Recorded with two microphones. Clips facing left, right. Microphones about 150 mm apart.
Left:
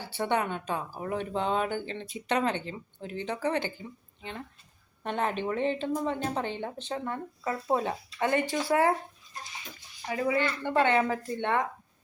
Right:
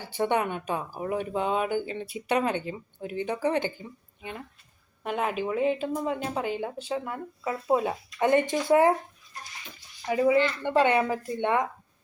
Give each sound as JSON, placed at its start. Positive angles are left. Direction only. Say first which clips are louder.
{"t": 0.0, "sound": "speech", "louder": "right 3 dB", "side_deg": -15}
{"t": 10.1, "sound": "speech", "louder": "right 6 dB", "side_deg": -25}